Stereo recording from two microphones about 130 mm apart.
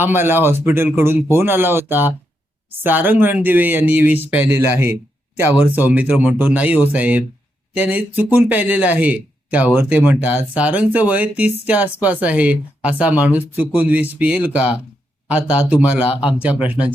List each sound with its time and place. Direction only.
0.0 s speech: 15° right (ahead or behind)